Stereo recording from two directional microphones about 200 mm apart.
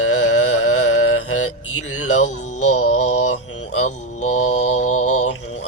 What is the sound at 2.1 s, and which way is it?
Music, 35° left (ahead or behind).